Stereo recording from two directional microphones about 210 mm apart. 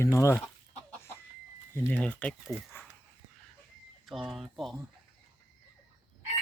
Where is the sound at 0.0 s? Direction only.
15° left (ahead or behind).